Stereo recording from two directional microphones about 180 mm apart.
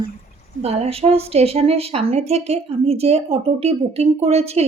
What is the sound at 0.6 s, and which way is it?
A woman's voice, 35° right (ahead or behind).